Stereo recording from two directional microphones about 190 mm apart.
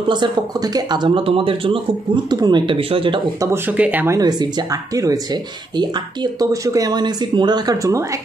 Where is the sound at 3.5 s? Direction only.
10° right (ahead or behind).